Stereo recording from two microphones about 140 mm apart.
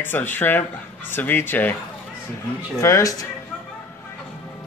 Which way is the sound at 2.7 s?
25° left (ahead or behind).